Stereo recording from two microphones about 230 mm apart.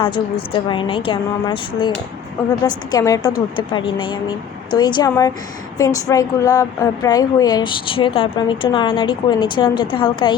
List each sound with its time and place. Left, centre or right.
0.0 s a woman's voice: left